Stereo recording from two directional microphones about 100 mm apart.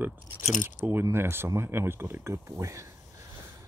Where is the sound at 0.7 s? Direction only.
20° right (ahead or behind).